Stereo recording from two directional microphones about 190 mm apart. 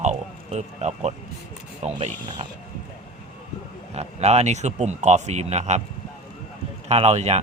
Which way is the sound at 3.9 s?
35° right (ahead or behind).